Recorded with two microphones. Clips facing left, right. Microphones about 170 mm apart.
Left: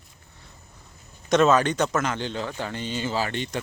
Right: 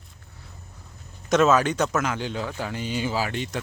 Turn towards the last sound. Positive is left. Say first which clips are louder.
# even
turn(degrees=-5)  # may be behind; listen again after turning